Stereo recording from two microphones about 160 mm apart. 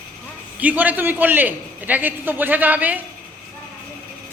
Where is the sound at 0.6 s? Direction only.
10° right (ahead or behind).